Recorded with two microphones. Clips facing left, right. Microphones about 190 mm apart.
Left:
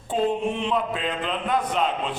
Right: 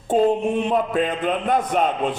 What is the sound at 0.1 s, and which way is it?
A man's voice, 45° right (ahead or behind).